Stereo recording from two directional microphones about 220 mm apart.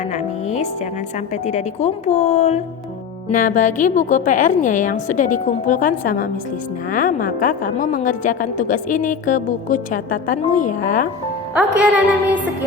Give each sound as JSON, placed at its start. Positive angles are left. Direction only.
{"t": 0.1, "sound": "music", "side_deg": 30}
{"t": 1.3, "sound": "a woman's voice", "side_deg": 30}
{"t": 11.5, "sound": "speech", "side_deg": -5}